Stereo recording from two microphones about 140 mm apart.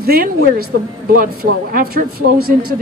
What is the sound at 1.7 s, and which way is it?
Speech, 90° right.